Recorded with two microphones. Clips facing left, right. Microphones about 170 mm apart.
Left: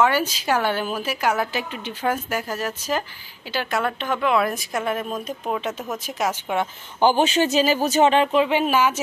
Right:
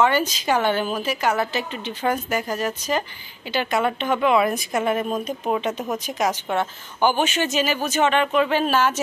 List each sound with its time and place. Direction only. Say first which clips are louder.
0.0 s a woman's voice: even; 5° left (ahead or behind)
7.0 s speech: left 3 dB; 30° left (ahead or behind); by 9.0 s 10° left (ahead or behind)